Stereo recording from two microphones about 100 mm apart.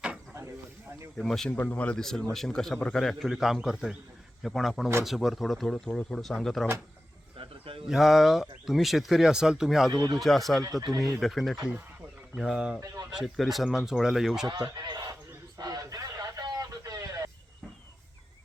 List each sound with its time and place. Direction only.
0.3 s snake: 30° right (ahead or behind)
1.2 s speech: 5° left (ahead or behind)
1.5 s speech: 15° left (ahead or behind)
7.3 s wild animals: 70° right (ahead or behind)
7.9 s speech: centre (ahead or behind)
9.9 s a man's voice: 40° right (ahead or behind)
10.2 s speech: centre (ahead or behind)
10.6 s speech: 35° right (ahead or behind)
11.2 s speech: centre (ahead or behind)
14.4 s a man's voice: 45° right (ahead or behind)
15.5 s vehicle: 40° right (ahead or behind)